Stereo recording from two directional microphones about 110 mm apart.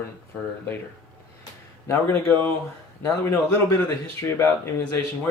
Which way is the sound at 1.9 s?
20° left (ahead or behind).